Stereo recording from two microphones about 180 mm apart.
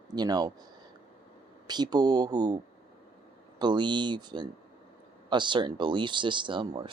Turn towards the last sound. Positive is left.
turn(degrees=-25)  # may be behind; listen again after turning